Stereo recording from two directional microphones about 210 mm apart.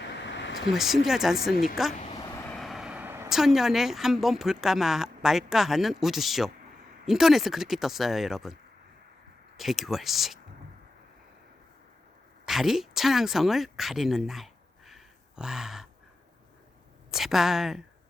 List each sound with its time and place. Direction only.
0.3 s a sound: 60° left (ahead or behind)
0.7 s speech: centre (ahead or behind)
2.5 s a sound: centre (ahead or behind)
4.6 s speech: centre (ahead or behind)
9.6 s speech: centre (ahead or behind)
12.5 s speech: centre (ahead or behind)
17.1 s speech: centre (ahead or behind)